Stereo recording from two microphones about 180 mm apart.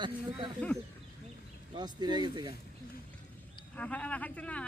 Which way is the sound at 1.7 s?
25° right (ahead or behind).